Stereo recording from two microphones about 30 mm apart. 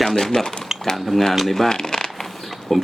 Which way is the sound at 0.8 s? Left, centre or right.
Centre.